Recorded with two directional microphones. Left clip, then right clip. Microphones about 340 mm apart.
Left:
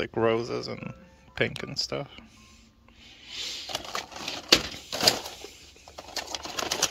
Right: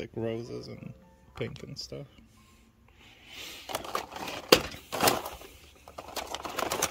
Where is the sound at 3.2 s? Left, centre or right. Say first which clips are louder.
Left 8 dB; centre.